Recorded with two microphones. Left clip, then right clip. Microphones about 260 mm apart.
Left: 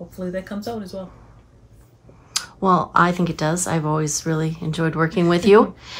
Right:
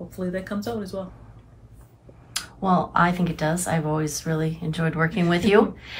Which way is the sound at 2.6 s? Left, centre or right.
Left.